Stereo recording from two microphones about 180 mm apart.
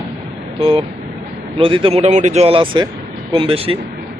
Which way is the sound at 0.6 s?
30° right (ahead or behind).